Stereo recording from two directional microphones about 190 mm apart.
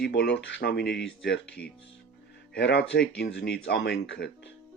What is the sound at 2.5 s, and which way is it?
Speech, 60° left (ahead or behind).